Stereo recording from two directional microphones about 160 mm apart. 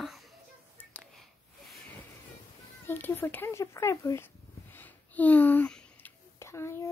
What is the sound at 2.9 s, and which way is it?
Speech, 15° left (ahead or behind).